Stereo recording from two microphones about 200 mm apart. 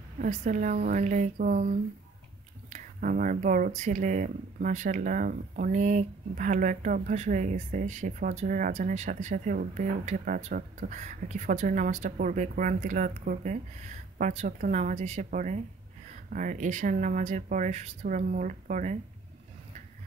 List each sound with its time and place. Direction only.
0.2 s speech: 35° right (ahead or behind)